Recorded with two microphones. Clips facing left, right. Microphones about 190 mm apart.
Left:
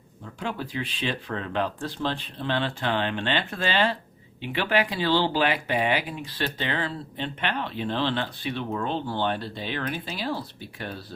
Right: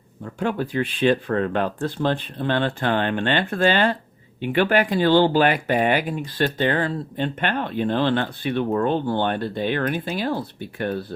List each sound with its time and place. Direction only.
0.3 s speech: 55° right (ahead or behind)